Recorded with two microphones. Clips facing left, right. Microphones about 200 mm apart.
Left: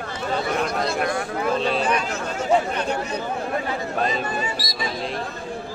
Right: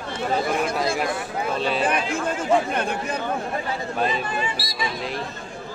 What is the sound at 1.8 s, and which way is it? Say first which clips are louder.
Speech: even; 55° right (ahead or behind).